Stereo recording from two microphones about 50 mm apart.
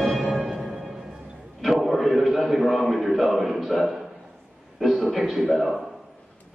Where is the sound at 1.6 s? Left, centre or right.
Centre.